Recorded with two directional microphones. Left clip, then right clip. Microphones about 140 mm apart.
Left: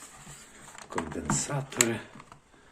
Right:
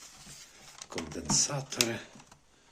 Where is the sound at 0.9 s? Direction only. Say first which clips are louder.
Left 2 dB; 20° right (ahead or behind).